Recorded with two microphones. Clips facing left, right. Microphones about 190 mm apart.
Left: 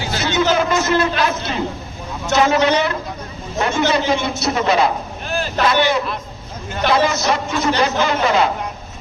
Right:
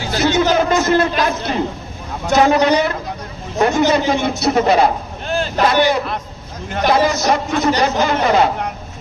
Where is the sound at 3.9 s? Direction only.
50° right (ahead or behind).